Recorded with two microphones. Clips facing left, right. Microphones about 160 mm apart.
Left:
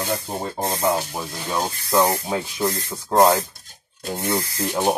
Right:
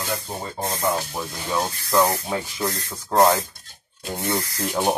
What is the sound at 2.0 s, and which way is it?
Speech, 15° left (ahead or behind).